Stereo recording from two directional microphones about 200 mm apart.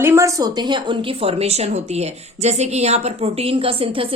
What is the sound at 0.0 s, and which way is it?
A woman's voice, 15° right (ahead or behind).